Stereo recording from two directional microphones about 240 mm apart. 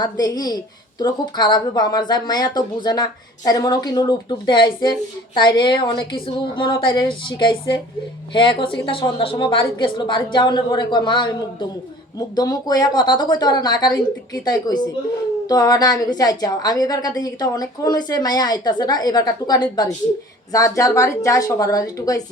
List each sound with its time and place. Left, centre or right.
0.0 s a woman's voice: centre
12.4 s a woman's voice: centre